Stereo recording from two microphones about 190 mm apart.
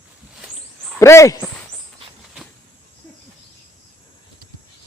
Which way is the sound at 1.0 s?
15° left (ahead or behind).